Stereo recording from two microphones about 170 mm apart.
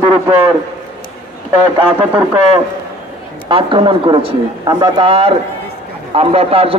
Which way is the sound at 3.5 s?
30° right (ahead or behind).